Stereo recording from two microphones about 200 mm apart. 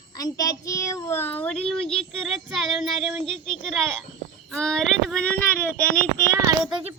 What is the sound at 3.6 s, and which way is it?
Child singing, centre (ahead or behind).